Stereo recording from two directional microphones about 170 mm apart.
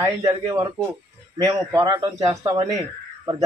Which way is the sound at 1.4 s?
25° right (ahead or behind).